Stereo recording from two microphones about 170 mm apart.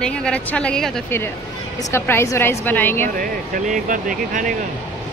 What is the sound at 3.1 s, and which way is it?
Speech, 55° right (ahead or behind).